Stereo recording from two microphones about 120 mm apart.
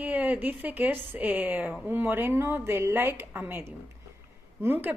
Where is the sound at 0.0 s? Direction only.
15° right (ahead or behind).